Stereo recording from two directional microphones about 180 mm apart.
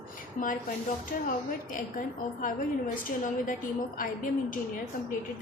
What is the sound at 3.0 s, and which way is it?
A woman's voice, 50° left (ahead or behind).